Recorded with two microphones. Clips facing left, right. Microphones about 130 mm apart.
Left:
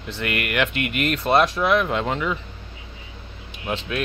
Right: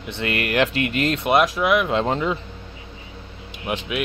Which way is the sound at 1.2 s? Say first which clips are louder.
Left 1 dB; 10° right (ahead or behind).